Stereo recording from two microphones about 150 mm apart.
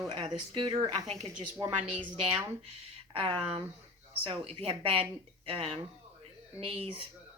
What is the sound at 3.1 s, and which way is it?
A woman's voice, 35° right (ahead or behind).